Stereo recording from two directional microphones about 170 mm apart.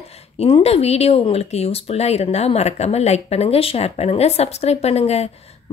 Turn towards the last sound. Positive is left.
turn(degrees=40)  # may be behind; listen again after turning